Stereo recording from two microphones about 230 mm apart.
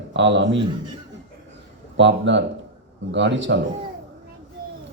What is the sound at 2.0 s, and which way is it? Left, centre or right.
Speech, right.